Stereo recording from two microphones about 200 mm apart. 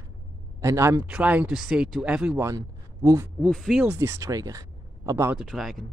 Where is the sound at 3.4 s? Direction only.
Centre (ahead or behind).